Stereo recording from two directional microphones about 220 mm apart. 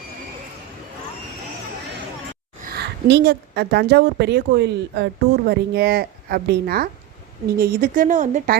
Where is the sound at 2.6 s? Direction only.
45° right (ahead or behind).